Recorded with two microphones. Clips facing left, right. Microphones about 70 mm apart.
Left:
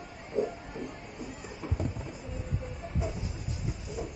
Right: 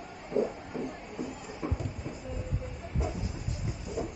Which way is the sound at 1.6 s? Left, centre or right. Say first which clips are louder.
Right 4 dB; right.